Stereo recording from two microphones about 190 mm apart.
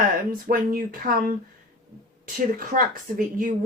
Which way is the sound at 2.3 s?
45° right (ahead or behind).